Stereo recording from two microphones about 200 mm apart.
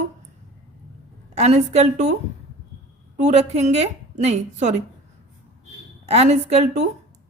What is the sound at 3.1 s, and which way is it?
A woman's voice, 35° right (ahead or behind).